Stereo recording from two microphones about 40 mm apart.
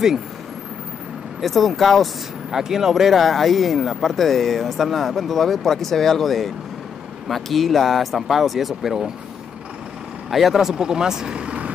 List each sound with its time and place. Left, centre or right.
1.4 s speech: centre
2.5 s speech: centre
3.2 s speech: centre
10.3 s speech: centre; by 11.7 s right